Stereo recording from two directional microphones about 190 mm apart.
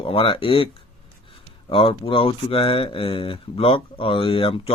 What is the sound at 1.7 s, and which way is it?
Speech, 30° left (ahead or behind).